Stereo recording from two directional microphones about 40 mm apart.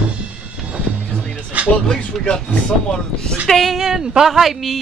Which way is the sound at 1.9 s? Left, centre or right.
Left.